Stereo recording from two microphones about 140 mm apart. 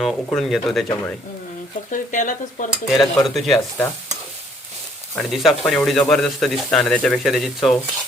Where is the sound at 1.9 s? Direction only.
65° left (ahead or behind).